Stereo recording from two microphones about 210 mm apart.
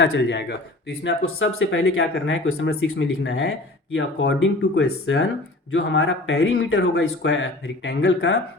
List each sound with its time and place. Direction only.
0.0 s speech: 55° left (ahead or behind)
1.2 s speech: 75° left (ahead or behind); by 8.4 s 55° left (ahead or behind)